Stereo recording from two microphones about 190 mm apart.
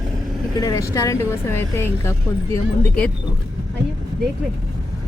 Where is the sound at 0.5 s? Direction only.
15° left (ahead or behind).